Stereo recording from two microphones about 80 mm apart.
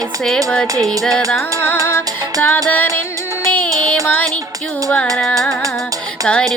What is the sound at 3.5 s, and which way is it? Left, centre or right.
Music, centre.